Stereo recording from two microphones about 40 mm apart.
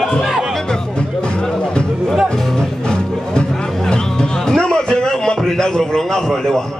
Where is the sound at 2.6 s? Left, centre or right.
Centre.